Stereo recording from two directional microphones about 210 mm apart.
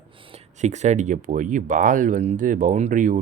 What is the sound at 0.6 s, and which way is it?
Speech, 35° right (ahead or behind).